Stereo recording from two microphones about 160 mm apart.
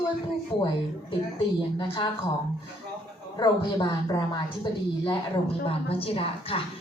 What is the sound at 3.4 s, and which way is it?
Speech, 30° left (ahead or behind).